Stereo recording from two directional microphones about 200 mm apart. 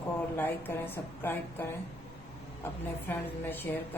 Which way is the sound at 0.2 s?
10° left (ahead or behind).